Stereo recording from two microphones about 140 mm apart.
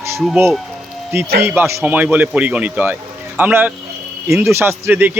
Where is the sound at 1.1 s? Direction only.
15° right (ahead or behind).